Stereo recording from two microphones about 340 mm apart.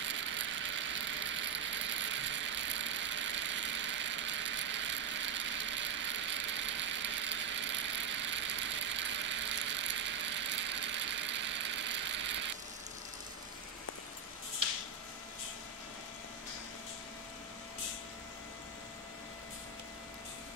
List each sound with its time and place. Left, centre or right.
0.0 s ratchet: right